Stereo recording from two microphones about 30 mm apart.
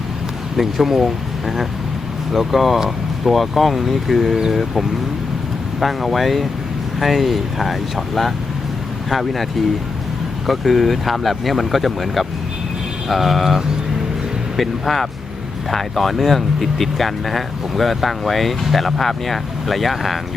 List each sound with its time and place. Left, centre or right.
0.5 s speech: centre